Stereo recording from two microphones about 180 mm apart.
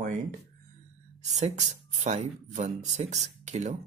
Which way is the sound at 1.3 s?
40° right (ahead or behind).